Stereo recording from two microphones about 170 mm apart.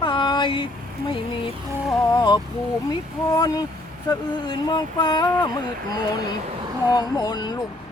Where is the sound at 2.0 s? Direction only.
25° left (ahead or behind).